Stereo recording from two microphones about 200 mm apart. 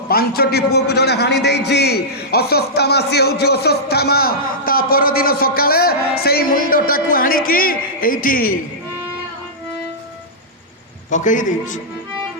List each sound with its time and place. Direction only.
0.1 s a man's voice: 50° left (ahead or behind)
11.1 s a man's voice: 40° left (ahead or behind)